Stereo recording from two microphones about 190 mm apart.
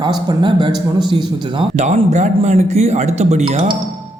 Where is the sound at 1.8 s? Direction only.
40° right (ahead or behind).